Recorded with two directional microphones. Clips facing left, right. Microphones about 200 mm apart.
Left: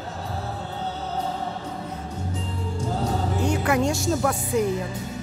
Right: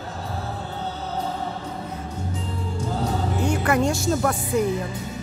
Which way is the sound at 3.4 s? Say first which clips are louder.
Right 1 dB; centre (ahead or behind).